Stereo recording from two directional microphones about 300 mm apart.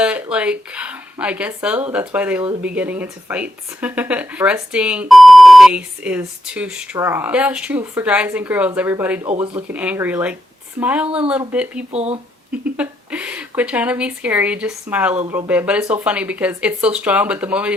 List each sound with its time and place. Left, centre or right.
0.0 s speech: centre
11.9 s speech: right
12.7 s speech: centre